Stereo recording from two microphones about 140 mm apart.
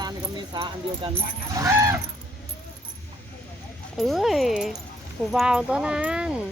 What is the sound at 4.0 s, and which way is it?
Speech, centre (ahead or behind).